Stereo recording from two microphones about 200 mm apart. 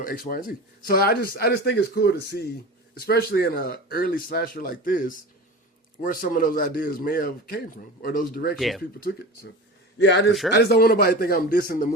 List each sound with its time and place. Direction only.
0.0 s speech: 45° left (ahead or behind)
8.5 s speech: centre (ahead or behind)
8.8 s speech: 50° left (ahead or behind)
10.0 s a man's voice: 60° left (ahead or behind)
10.5 s speech: 50° left (ahead or behind)